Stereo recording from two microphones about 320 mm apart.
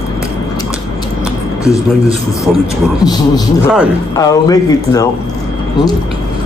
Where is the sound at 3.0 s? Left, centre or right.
Centre.